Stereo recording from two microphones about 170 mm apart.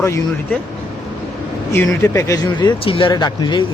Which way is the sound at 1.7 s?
15° left (ahead or behind).